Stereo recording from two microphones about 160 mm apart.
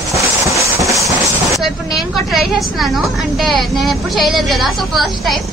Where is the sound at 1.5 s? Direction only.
Centre (ahead or behind).